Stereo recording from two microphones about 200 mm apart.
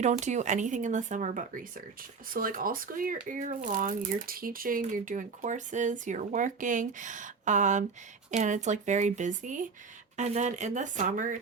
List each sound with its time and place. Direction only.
0.0 s speech: 35° right (ahead or behind)